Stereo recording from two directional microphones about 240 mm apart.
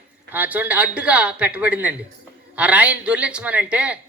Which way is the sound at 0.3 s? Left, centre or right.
Centre.